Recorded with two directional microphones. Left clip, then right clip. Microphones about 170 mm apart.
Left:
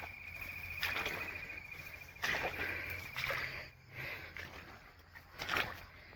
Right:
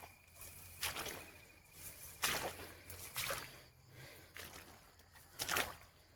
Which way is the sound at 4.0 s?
30° right (ahead or behind).